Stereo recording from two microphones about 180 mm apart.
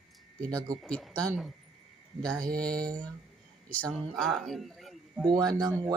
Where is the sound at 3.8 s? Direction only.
5° right (ahead or behind).